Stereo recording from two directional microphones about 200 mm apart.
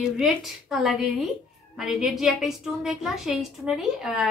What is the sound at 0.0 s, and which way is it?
A woman's voice, centre (ahead or behind).